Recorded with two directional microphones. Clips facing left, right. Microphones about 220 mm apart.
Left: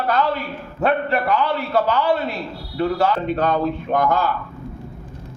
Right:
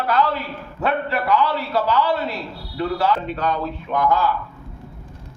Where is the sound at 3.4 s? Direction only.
50° left (ahead or behind).